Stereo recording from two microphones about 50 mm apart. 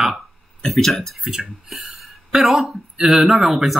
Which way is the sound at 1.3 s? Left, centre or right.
Centre.